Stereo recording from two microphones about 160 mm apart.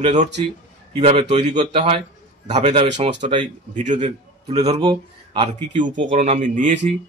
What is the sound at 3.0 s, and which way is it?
A man's voice, 45° right (ahead or behind).